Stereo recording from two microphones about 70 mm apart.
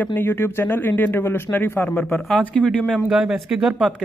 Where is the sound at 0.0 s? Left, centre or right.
Left.